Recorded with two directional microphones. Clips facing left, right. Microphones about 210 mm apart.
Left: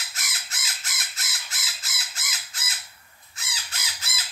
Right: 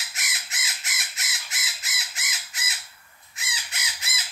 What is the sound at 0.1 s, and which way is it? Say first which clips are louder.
Crow: right 1 dB; 20° right (ahead or behind).